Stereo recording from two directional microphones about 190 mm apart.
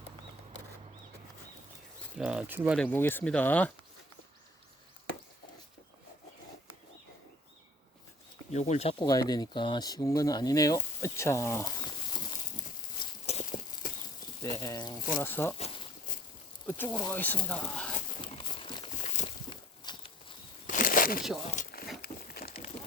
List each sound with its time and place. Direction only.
2.1 s speech: 5° right (ahead or behind)
2.7 s speech: 10° left (ahead or behind)
8.5 s speech: 35° left (ahead or behind)
9.0 s speech: 20° left (ahead or behind)
13.2 s clip-clop: 35° left (ahead or behind)
14.6 s speech: 20° left (ahead or behind)
15.5 s a sound: 30° left (ahead or behind)
16.6 s speech: 10° left (ahead or behind)
18.2 s a sound: 25° left (ahead or behind)
19.8 s walk: 25° left (ahead or behind)
20.7 s a sound: 45° left (ahead or behind)